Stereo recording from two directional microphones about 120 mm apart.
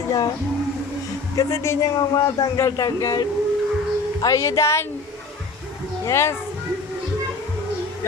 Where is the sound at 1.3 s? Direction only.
25° left (ahead or behind).